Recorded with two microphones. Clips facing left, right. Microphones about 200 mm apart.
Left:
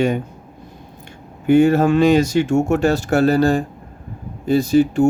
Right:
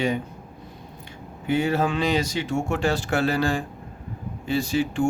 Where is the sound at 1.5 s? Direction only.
45° left (ahead or behind).